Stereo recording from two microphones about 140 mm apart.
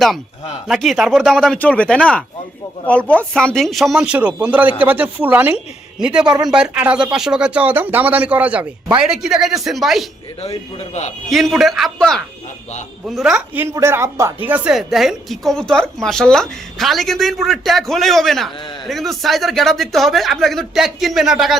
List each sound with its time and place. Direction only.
0.7 s speech: centre (ahead or behind)
11.3 s speech: centre (ahead or behind)